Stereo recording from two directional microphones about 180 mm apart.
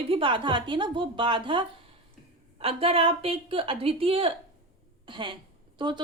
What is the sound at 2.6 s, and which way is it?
A woman's voice, 30° right (ahead or behind).